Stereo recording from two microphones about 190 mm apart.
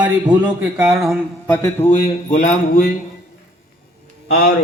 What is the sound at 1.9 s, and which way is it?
Speech, 40° left (ahead or behind).